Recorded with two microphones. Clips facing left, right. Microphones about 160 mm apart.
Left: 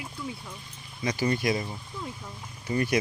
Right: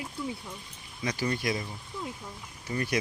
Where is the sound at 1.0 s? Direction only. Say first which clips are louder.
Left 4 dB; 5° left (ahead or behind).